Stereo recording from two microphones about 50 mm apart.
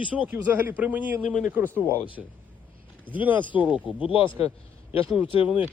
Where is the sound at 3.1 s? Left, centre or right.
Right.